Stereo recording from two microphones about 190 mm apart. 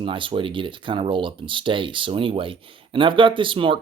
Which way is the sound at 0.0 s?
25° right (ahead or behind).